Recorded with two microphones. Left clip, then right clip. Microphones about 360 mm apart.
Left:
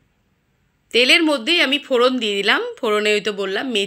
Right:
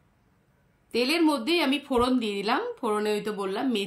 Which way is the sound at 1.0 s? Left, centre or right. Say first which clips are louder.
Left 9 dB; centre.